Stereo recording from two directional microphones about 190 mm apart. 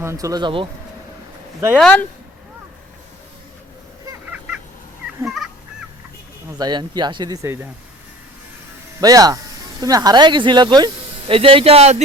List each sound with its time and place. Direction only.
0.0 s speech: 15° right (ahead or behind)
1.8 s speech: 5° left (ahead or behind)
4.0 s a sound: 10° right (ahead or behind)
5.2 s goose: centre (ahead or behind)
6.6 s speech: 20° right (ahead or behind)
9.0 s speech: 20° right (ahead or behind)